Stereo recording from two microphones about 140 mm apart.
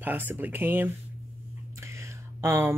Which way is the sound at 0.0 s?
15° right (ahead or behind).